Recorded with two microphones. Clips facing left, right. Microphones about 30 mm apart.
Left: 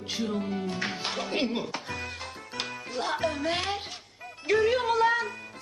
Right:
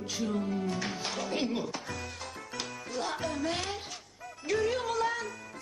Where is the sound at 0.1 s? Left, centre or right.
Left.